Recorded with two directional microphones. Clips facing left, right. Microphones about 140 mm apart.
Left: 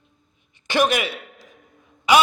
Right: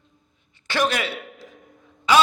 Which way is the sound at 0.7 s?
15° left (ahead or behind).